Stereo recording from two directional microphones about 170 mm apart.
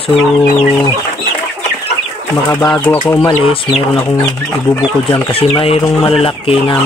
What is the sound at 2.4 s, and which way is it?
Speech, 20° left (ahead or behind).